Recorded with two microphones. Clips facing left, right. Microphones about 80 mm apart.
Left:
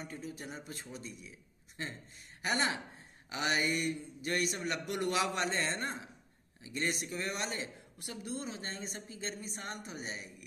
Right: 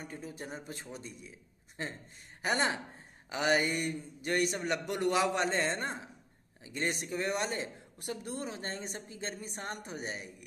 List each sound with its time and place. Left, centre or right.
0.0 s a man's voice: right
2.4 s a man's voice: right